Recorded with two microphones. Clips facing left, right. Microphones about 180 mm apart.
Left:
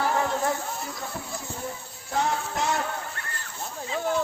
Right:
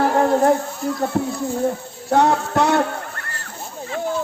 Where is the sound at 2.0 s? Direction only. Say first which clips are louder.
Right 10 dB; 65° right (ahead or behind).